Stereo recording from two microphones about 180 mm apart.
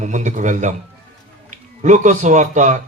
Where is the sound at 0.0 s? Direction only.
45° right (ahead or behind).